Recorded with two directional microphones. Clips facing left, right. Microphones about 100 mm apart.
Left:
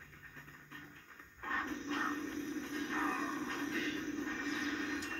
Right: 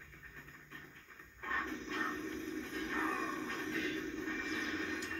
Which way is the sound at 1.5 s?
30° left (ahead or behind).